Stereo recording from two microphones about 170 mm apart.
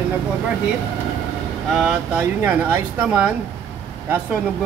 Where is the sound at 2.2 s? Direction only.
15° right (ahead or behind).